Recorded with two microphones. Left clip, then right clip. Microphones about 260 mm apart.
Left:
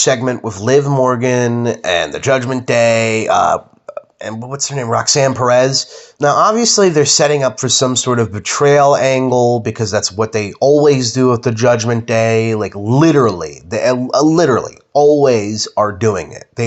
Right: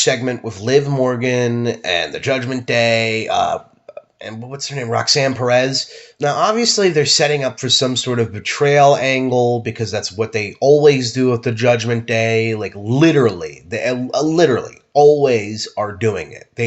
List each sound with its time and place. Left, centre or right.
0.0 s speech: centre